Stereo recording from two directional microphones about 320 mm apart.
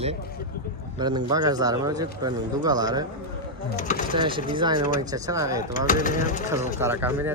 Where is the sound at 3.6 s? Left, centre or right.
Left.